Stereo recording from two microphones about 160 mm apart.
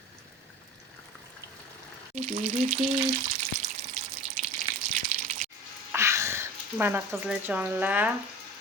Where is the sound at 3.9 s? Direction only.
55° right (ahead or behind).